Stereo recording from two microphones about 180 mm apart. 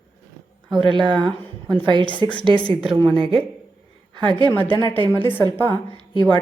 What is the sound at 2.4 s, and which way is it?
Speech, 30° right (ahead or behind).